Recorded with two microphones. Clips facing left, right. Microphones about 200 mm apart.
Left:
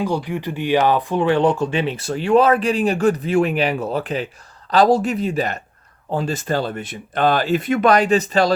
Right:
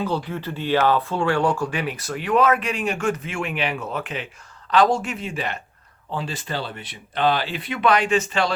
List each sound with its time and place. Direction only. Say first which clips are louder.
0.0 s speech: left 3 dB; 15° left (ahead or behind); by 8.5 s 40° left (ahead or behind)